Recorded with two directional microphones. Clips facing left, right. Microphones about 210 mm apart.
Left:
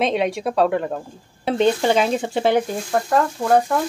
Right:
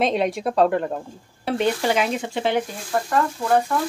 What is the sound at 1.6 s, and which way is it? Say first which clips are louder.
Stir: left 4 dB; 25° left (ahead or behind).